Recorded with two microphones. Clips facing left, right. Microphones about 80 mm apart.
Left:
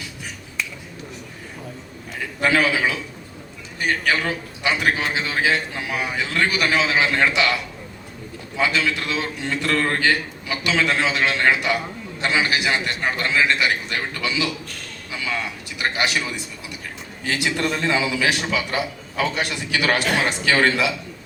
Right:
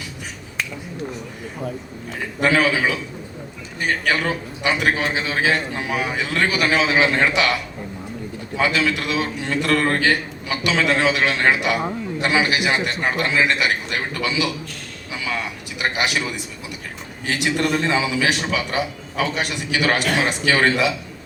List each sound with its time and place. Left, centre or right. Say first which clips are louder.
2.5 s a man's voice: right 1 dB; centre
4.2 s a man's voice: right 2 dB; centre
17.4 s a man's voice: right 3 dB; centre